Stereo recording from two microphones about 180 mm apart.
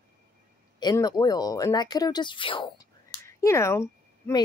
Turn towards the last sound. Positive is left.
turn(degrees=15)  # may be behind; listen again after turning